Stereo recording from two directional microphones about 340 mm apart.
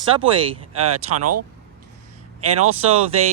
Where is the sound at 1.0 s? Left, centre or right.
Right.